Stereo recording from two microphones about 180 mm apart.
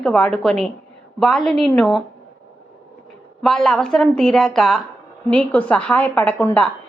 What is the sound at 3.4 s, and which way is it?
A woman's voice, centre (ahead or behind).